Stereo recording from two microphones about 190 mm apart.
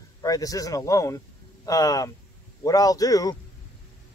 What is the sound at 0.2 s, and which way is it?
Speech, 20° left (ahead or behind).